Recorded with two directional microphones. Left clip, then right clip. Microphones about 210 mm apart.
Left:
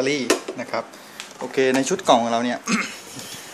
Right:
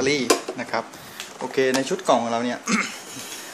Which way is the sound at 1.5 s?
15° left (ahead or behind).